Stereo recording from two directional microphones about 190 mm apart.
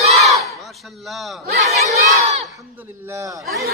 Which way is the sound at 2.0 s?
35° right (ahead or behind).